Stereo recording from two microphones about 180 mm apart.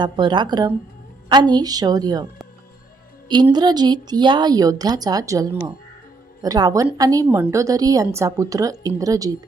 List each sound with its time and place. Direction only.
0.0 s a woman's voice: 25° right (ahead or behind)
3.5 s a woman's voice: 25° right (ahead or behind)